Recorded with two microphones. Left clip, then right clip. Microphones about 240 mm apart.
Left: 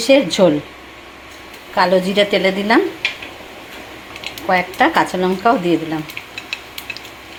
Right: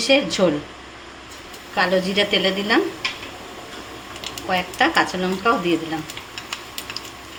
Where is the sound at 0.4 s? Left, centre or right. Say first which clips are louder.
Left 6 dB; centre.